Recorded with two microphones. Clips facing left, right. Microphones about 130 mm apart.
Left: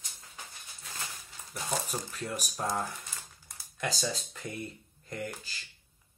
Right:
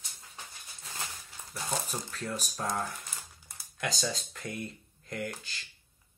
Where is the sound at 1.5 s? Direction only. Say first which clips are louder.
Left 1 dB; 10° left (ahead or behind).